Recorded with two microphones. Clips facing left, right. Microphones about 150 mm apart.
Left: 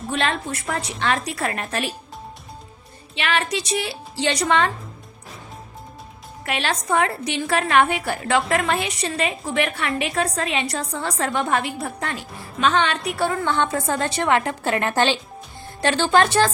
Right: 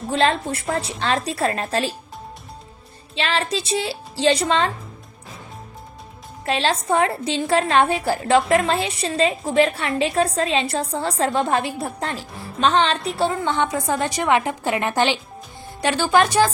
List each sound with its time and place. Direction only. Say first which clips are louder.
0.1 s a woman's voice: right 5 dB; 30° right (ahead or behind)
3.2 s a woman's voice: right 1 dB; 30° right (ahead or behind)
6.4 s a woman's voice: right 4 dB; 25° right (ahead or behind)